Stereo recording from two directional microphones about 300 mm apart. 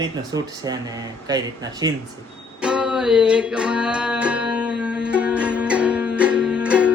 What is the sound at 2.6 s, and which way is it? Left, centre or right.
Music, centre.